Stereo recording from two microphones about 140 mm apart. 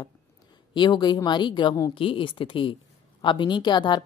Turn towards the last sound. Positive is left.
turn(degrees=35)  # may be behind; listen again after turning